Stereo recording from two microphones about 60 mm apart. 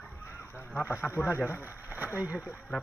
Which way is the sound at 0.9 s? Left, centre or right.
Left.